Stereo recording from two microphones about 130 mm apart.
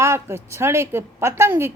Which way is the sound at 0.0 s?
20° right (ahead or behind).